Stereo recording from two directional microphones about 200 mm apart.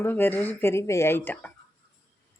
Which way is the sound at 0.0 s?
10° left (ahead or behind).